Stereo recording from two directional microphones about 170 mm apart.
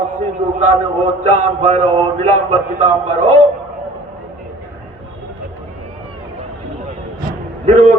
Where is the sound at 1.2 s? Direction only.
40° right (ahead or behind).